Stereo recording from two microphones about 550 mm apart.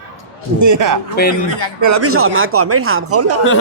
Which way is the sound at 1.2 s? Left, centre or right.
Centre.